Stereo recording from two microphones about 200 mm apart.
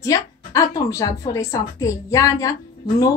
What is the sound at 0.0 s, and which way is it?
Speech, 15° left (ahead or behind).